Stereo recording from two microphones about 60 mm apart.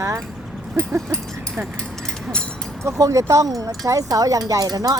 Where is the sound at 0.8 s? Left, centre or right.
Right.